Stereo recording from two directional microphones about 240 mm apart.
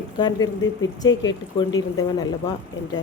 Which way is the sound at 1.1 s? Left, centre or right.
Left.